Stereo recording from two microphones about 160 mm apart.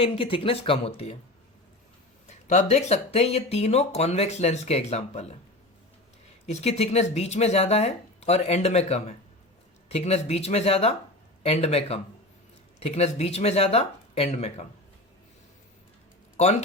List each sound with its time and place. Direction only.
0.0 s speech: 35° left (ahead or behind)
2.5 s speech: 45° left (ahead or behind)
6.4 s speech: 40° left (ahead or behind)